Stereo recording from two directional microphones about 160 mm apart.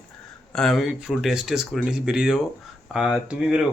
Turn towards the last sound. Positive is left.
turn(degrees=-5)  # may be behind; listen again after turning